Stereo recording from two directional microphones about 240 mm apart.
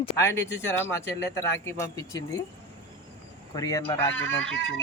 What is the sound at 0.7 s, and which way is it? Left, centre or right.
Speech, centre.